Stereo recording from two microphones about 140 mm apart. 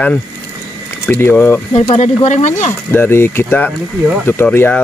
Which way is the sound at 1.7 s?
50° left (ahead or behind).